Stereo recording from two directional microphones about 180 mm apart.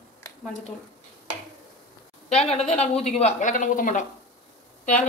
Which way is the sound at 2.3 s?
35° left (ahead or behind).